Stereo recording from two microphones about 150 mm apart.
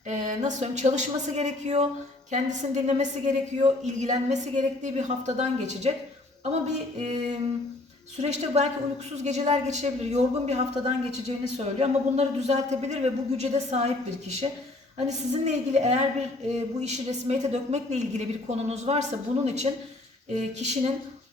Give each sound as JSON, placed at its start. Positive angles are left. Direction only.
{"t": 0.1, "sound": "a woman's voice", "side_deg": -55}
{"t": 8.2, "sound": "a woman's voice", "side_deg": -50}
{"t": 14.9, "sound": "a woman's voice", "side_deg": -50}